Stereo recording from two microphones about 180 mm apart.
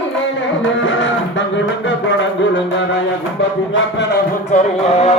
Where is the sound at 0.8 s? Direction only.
90° left.